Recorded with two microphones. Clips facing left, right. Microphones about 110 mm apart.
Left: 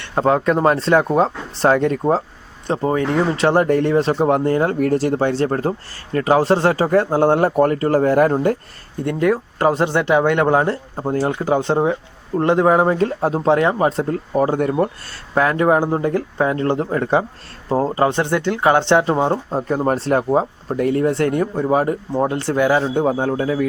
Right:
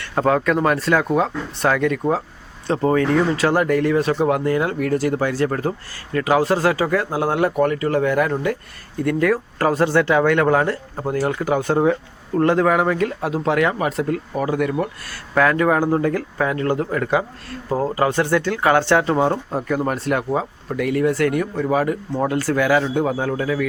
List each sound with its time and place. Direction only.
0.0 s speech: 25° left (ahead or behind)
2.6 s speech: 20° left (ahead or behind); by 8.5 s 40° left (ahead or behind)
9.0 s speech: 20° left (ahead or behind)
15.4 s speech: 25° left (ahead or behind)